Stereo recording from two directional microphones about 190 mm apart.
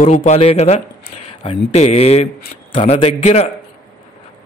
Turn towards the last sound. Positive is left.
turn(degrees=35)  # may be behind; listen again after turning